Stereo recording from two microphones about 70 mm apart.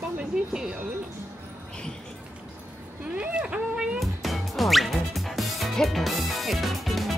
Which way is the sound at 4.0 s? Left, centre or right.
Centre.